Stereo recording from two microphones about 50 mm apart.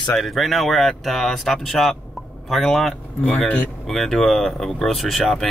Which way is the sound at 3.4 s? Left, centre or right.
Left.